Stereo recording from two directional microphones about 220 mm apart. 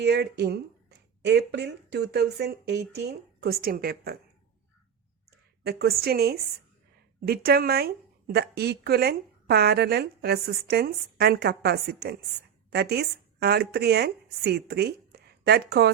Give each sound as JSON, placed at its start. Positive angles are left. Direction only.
{"t": 0.0, "sound": "a woman's voice", "side_deg": -50}
{"t": 5.6, "sound": "a woman's voice", "side_deg": -45}